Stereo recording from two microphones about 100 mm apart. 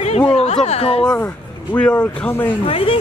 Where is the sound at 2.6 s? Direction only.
70° left (ahead or behind).